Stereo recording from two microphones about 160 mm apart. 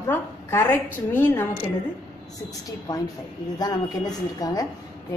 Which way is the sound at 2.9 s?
25° left (ahead or behind).